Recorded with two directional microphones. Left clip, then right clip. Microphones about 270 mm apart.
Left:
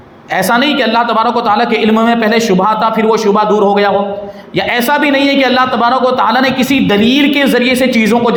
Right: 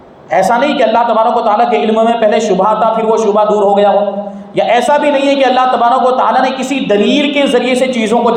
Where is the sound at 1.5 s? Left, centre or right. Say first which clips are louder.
Right 1 dB; left.